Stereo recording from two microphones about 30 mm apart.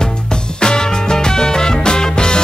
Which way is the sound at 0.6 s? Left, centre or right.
Left.